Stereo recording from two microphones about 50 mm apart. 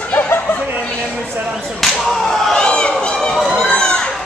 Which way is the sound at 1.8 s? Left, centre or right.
Centre.